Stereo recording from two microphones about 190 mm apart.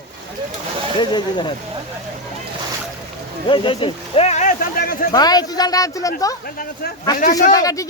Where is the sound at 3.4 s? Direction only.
25° left (ahead or behind); by 5.0 s 50° left (ahead or behind).